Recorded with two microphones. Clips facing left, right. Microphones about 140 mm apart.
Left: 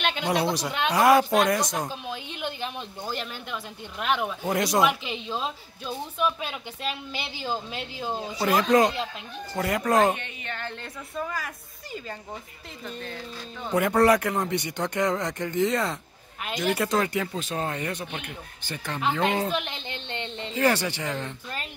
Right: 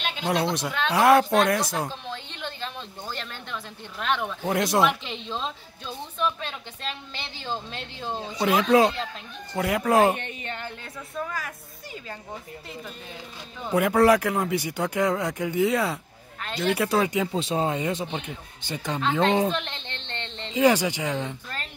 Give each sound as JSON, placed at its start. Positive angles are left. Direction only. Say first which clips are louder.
{"t": 0.3, "sound": "speech", "louder": "right 2 dB", "side_deg": 0}
{"t": 1.9, "sound": "a woman's voice", "louder": "left 1 dB", "side_deg": 10}
{"t": 16.3, "sound": "speech", "louder": "right 1 dB", "side_deg": 10}
{"t": 16.7, "sound": "speech", "louder": "right 3 dB", "side_deg": -5}
{"t": 19.5, "sound": "a woman's voice", "louder": "left 1 dB", "side_deg": 5}
{"t": 20.5, "sound": "speech", "louder": "right 4 dB", "side_deg": -10}